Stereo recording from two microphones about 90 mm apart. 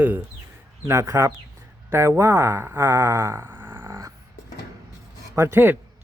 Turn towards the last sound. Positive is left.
turn(degrees=-25)  # may be behind; listen again after turning